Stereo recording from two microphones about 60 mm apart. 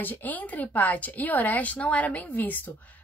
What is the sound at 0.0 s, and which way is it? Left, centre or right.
A woman's voice, left.